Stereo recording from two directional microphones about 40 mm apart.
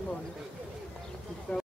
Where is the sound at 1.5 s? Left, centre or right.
Left.